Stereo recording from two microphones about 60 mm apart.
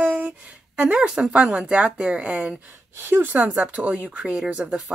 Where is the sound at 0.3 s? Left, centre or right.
Centre.